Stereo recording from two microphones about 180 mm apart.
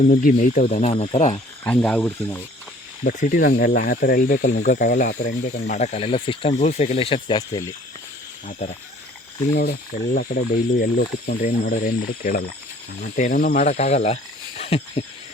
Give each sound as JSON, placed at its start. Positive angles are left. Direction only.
{"t": 0.0, "sound": "speech", "side_deg": 50}
{"t": 1.6, "sound": "speech", "side_deg": 5}
{"t": 3.0, "sound": "speech", "side_deg": 45}
{"t": 8.4, "sound": "speech", "side_deg": 45}
{"t": 9.6, "sound": "speech", "side_deg": 55}
{"t": 10.8, "sound": "speech", "side_deg": 60}
{"t": 14.6, "sound": "a sound", "side_deg": 35}